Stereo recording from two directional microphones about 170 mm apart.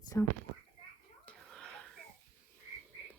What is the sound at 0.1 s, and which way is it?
Speech, 15° left (ahead or behind).